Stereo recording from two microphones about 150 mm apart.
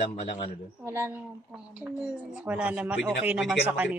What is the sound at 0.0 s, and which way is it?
Speech, 45° left (ahead or behind).